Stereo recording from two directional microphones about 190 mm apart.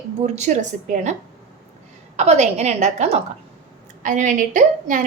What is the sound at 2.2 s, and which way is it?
A woman's voice, 35° right (ahead or behind).